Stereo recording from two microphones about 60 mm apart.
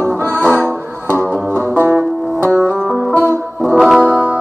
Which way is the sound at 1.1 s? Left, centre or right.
Right.